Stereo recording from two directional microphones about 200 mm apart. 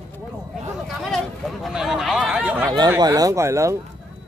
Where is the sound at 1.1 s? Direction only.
Centre (ahead or behind).